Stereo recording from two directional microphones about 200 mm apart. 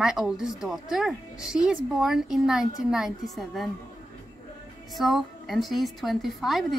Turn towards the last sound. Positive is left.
turn(degrees=0)  # may be behind; listen again after turning